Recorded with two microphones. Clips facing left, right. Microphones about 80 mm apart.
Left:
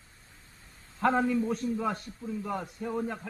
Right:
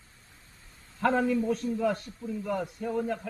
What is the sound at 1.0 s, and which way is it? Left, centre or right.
A man's voice, centre.